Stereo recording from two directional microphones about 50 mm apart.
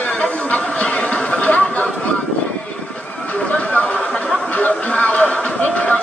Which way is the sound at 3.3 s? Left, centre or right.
Left.